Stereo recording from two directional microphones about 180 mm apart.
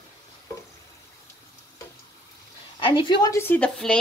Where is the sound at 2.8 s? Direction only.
25° left (ahead or behind); by 4.0 s 5° left (ahead or behind).